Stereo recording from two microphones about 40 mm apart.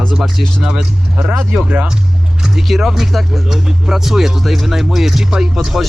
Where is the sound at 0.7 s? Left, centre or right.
Centre.